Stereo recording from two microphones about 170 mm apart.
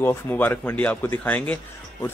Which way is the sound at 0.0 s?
15° left (ahead or behind).